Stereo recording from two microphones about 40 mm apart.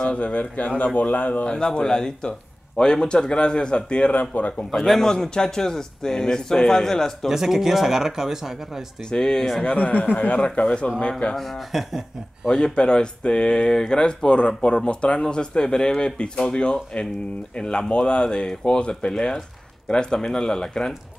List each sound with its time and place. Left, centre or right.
0.0 s speech: left
1.4 s speech: left
4.1 s speech: left
4.6 s a man's voice: centre
7.2 s speech: centre
9.1 s a man's voice: centre
9.7 s speech: left
10.5 s speech: left
11.3 s speech: centre
12.4 s a man's voice: centre